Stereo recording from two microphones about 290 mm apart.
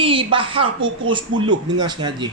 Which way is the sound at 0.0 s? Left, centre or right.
Centre.